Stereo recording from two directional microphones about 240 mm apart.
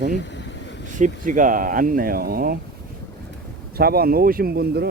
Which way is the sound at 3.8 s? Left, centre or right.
Right.